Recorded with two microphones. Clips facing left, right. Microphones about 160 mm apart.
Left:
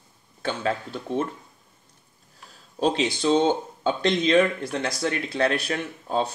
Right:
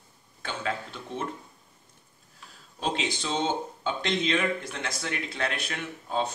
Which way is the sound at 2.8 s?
35° left (ahead or behind).